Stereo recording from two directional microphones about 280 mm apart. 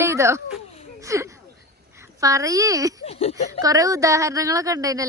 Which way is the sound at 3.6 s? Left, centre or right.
Centre.